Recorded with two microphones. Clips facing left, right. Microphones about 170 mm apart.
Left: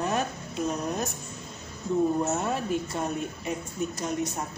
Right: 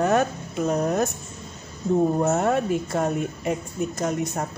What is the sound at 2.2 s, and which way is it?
Speech, 65° right (ahead or behind).